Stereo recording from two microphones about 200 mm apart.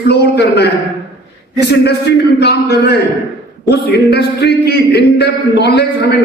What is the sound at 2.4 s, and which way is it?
A man's voice, 55° left (ahead or behind).